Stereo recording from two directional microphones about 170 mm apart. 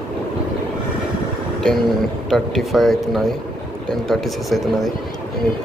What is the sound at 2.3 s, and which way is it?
Speech, centre (ahead or behind).